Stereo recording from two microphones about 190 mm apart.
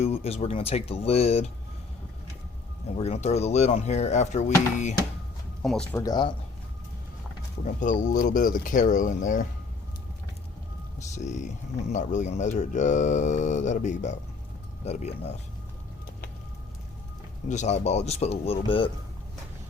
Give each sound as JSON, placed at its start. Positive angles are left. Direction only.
{"t": 0.0, "sound": "speech", "side_deg": 35}
{"t": 3.0, "sound": "speech", "side_deg": 35}
{"t": 5.6, "sound": "speech", "side_deg": 5}
{"t": 6.0, "sound": "speech", "side_deg": 20}
{"t": 7.6, "sound": "speech", "side_deg": 40}
{"t": 11.1, "sound": "speech", "side_deg": 40}
{"t": 17.5, "sound": "speech", "side_deg": 35}